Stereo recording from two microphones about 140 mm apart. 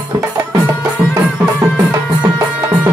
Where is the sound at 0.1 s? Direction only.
20° right (ahead or behind).